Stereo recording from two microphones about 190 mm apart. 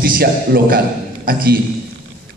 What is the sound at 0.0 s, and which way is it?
A man's voice, 50° right (ahead or behind).